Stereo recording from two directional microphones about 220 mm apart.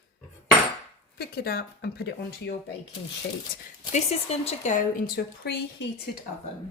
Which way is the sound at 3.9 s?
30° left (ahead or behind).